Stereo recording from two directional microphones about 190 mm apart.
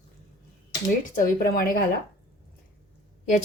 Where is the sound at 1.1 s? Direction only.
50° left (ahead or behind).